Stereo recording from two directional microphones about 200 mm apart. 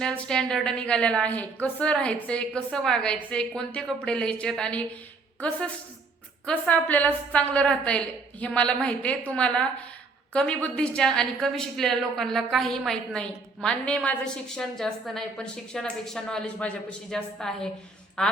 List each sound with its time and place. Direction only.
0.0 s a woman's voice: 5° left (ahead or behind)